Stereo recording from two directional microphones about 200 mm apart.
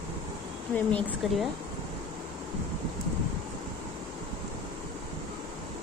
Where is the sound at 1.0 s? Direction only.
Centre (ahead or behind).